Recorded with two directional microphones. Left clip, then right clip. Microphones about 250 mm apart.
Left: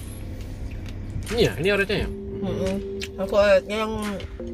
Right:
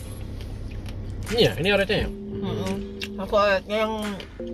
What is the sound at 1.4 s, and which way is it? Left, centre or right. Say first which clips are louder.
Speech: even; centre.